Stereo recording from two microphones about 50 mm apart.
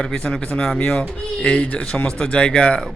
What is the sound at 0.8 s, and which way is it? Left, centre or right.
Speech, left.